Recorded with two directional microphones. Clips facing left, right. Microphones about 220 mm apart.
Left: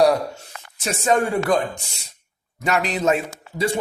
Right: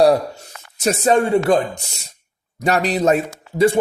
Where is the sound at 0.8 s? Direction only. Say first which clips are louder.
Right 6 dB; 40° right (ahead or behind).